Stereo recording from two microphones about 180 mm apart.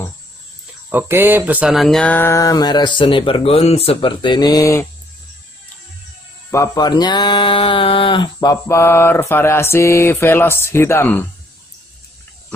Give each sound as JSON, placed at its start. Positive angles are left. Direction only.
{"t": 0.8, "sound": "speech", "side_deg": -10}
{"t": 6.5, "sound": "mantra", "side_deg": 20}